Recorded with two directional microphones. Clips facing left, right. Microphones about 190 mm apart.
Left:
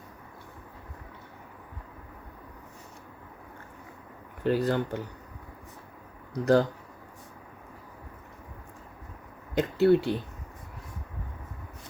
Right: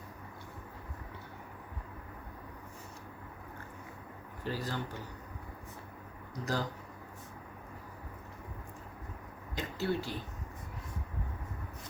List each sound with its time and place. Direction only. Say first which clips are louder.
4.4 s speech: left 12 dB; 60° left (ahead or behind)
6.4 s speech: left 13 dB; 65° left (ahead or behind)
9.6 s speech: left 13 dB; 60° left (ahead or behind)